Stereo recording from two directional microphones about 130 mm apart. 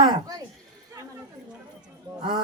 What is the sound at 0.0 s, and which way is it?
Speech, 30° right (ahead or behind).